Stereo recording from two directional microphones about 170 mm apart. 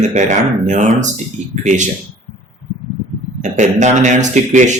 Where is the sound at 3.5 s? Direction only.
45° right (ahead or behind).